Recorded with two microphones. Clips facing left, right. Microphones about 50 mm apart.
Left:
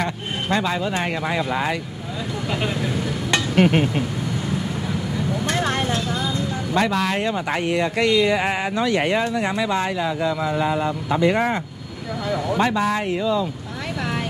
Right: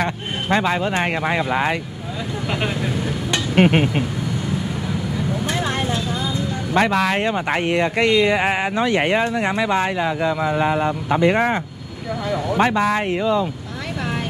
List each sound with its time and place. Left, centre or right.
0.0 s speech: right
3.5 s speech: right
6.7 s speech: right
12.3 s speech: centre
12.5 s speech: right